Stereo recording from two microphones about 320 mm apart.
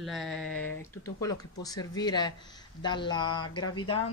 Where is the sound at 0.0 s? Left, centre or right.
Centre.